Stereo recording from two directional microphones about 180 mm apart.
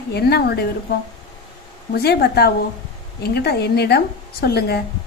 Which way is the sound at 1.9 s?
65° left (ahead or behind).